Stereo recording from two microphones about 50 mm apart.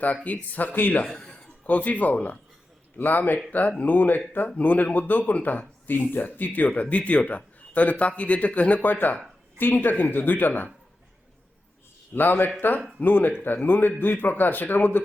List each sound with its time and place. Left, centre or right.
0.3 s speech: left
1.1 s a sound: centre
1.6 s speech: left
12.1 s speech: left